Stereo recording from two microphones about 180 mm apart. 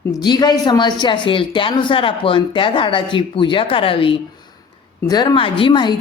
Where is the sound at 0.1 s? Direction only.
25° left (ahead or behind).